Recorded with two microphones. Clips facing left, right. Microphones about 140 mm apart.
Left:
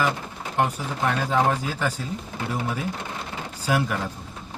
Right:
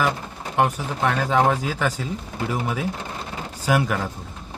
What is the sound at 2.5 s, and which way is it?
Speech, 80° right.